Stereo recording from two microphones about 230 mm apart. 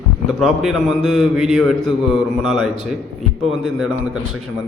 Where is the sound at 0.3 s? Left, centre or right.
Centre.